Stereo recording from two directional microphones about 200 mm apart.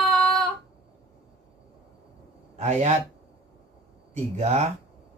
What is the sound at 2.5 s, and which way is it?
Speech, 35° right (ahead or behind).